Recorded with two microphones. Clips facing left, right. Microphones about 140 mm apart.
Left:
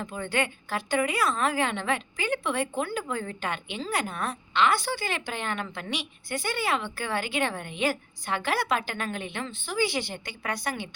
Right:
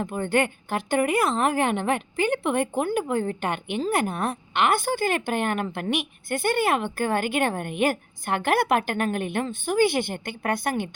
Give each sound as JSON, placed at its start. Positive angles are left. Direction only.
{"t": 0.1, "sound": "a woman's voice", "side_deg": -50}